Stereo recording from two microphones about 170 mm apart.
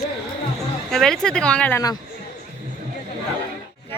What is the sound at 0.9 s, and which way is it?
Speech, 5° left (ahead or behind).